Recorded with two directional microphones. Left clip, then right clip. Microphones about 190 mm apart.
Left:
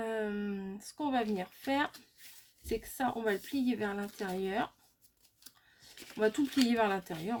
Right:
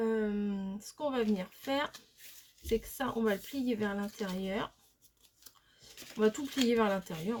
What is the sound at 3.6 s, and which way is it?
Speech, 30° left (ahead or behind).